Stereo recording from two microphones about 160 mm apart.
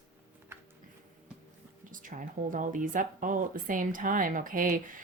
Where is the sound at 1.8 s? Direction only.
55° right (ahead or behind).